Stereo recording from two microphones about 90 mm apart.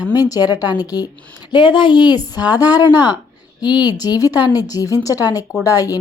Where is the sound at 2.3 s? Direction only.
50° left (ahead or behind).